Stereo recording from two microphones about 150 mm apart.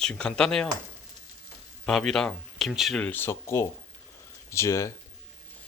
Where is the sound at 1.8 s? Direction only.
5° left (ahead or behind).